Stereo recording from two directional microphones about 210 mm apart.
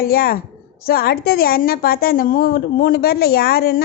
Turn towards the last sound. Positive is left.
turn(degrees=45)  # may be behind; listen again after turning